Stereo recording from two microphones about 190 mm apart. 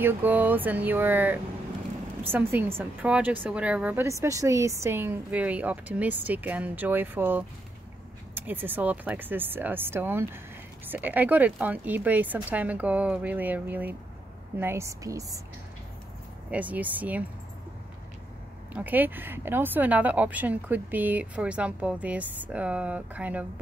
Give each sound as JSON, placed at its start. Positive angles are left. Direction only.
{"t": 0.0, "sound": "speech", "side_deg": -10}
{"t": 16.4, "sound": "speech", "side_deg": -10}
{"t": 18.7, "sound": "speech", "side_deg": -10}